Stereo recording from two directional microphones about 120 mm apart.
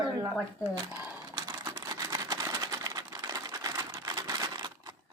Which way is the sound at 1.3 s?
30° right (ahead or behind).